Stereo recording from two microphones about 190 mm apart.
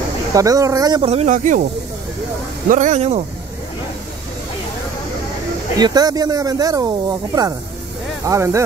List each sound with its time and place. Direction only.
0.3 s speech: 20° right (ahead or behind)
1.1 s speech: 40° right (ahead or behind)
2.7 s speech: 40° right (ahead or behind)
5.8 s speech: 20° right (ahead or behind)